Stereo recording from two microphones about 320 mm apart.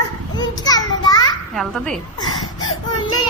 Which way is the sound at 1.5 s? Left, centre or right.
Centre.